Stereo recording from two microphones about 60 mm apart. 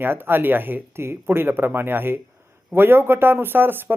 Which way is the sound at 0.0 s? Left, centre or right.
Right.